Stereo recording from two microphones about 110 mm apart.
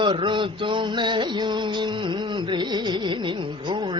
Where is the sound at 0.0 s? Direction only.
45° right (ahead or behind).